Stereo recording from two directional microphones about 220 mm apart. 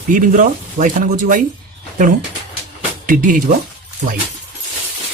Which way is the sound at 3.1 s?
40° right (ahead or behind).